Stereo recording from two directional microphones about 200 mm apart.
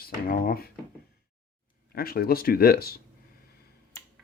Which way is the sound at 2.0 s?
50° left (ahead or behind).